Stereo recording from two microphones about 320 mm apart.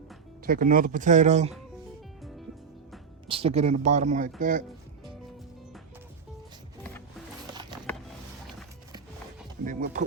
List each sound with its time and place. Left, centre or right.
0.4 s speech: right
3.2 s speech: centre
9.6 s a sound: right